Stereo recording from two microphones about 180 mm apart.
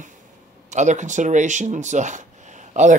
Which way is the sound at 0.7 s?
40° right (ahead or behind).